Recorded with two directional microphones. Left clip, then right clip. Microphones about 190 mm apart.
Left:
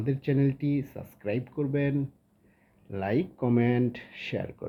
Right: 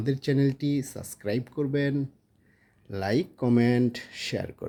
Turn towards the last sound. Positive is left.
turn(degrees=-40)  # may be behind; listen again after turning